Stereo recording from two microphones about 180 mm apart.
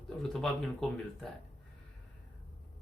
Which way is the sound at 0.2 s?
Centre (ahead or behind).